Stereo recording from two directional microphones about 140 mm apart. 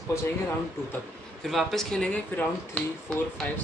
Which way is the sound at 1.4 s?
Centre (ahead or behind).